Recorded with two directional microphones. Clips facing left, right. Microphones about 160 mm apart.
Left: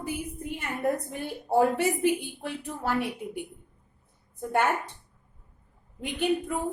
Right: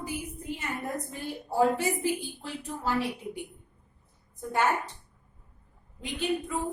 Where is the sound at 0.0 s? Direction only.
55° left (ahead or behind).